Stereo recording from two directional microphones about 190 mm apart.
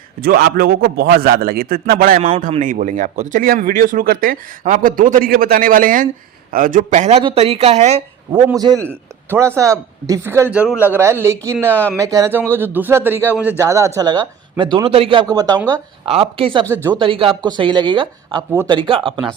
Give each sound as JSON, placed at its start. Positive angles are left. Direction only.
{"t": 0.2, "sound": "speech", "side_deg": -55}
{"t": 2.1, "sound": "a man's voice", "side_deg": -30}
{"t": 2.5, "sound": "speech", "side_deg": -40}
{"t": 8.3, "sound": "speech", "side_deg": -5}
{"t": 11.7, "sound": "speech", "side_deg": 10}
{"t": 11.9, "sound": "a man's voice", "side_deg": -15}
{"t": 15.7, "sound": "a man's voice", "side_deg": -30}